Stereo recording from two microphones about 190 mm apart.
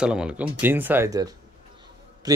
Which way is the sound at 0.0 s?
5° right (ahead or behind).